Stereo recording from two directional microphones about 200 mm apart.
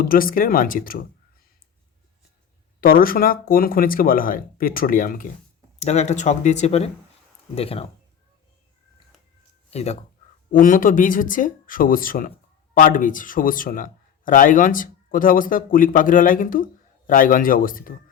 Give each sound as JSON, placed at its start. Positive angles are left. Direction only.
{"t": 0.0, "sound": "speech", "side_deg": 45}
{"t": 2.8, "sound": "speech", "side_deg": 45}
{"t": 9.6, "sound": "speech", "side_deg": 35}